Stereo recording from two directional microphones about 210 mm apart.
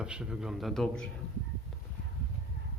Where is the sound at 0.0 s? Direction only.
5° right (ahead or behind).